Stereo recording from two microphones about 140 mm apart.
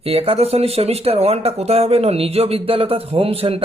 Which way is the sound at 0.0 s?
45° right (ahead or behind).